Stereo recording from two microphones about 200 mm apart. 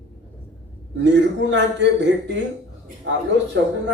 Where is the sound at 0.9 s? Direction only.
65° right (ahead or behind).